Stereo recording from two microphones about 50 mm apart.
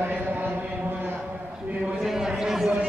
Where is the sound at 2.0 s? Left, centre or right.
Centre.